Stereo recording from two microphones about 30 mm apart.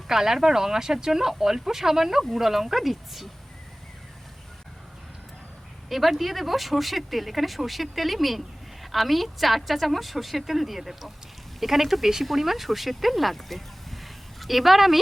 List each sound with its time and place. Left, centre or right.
0.1 s speech: centre
5.9 s speech: centre